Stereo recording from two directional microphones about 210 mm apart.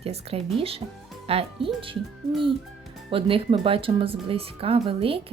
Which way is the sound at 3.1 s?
25° right (ahead or behind).